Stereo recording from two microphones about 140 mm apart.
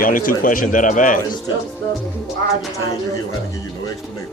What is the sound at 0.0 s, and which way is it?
A man's voice, 80° left.